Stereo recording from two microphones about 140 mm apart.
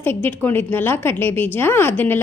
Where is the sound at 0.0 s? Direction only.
15° left (ahead or behind).